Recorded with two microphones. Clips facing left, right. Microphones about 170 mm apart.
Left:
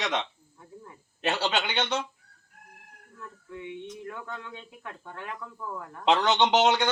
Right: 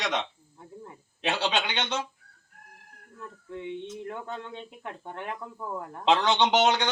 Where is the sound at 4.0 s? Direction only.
25° right (ahead or behind).